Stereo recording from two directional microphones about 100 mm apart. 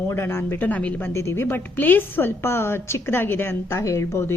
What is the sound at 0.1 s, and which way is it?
A woman's voice, 25° left (ahead or behind).